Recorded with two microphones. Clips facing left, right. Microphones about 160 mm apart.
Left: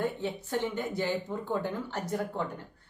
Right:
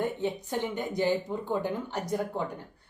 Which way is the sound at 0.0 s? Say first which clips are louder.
Right 2 dB; 15° right (ahead or behind).